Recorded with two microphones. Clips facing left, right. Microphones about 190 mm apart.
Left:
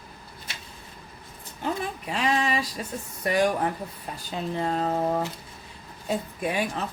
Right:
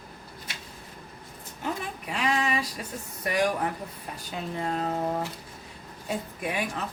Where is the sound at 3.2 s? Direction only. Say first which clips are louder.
Left 3 dB; 30° left (ahead or behind).